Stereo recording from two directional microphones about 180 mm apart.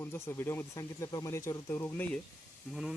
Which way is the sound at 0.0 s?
15° left (ahead or behind).